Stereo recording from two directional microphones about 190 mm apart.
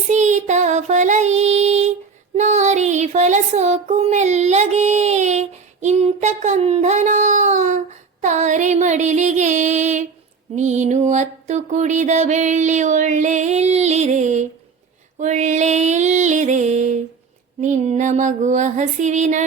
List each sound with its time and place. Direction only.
0.1 s child singing: 40° right (ahead or behind)
8.2 s music: 40° right (ahead or behind)